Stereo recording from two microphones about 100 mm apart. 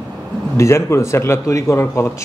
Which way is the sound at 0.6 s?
25° left (ahead or behind).